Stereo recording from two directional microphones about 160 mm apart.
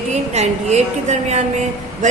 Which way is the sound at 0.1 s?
45° right (ahead or behind).